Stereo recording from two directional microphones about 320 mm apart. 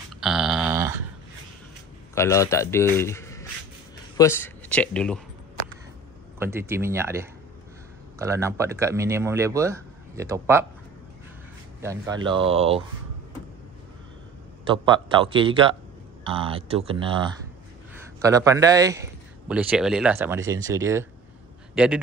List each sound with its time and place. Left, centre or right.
0.2 s a sound: centre
2.1 s a man's voice: centre
6.4 s speech: centre
11.8 s speech: centre
14.7 s speech: centre